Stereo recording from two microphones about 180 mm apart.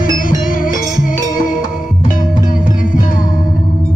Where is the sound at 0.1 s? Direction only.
50° left (ahead or behind).